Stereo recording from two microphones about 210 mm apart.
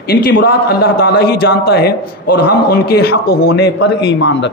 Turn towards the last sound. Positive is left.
turn(degrees=60)  # may be behind; listen again after turning